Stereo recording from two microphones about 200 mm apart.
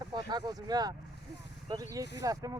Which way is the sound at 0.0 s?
20° right (ahead or behind).